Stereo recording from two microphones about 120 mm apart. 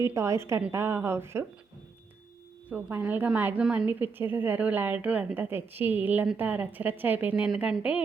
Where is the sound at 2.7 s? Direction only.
15° right (ahead or behind).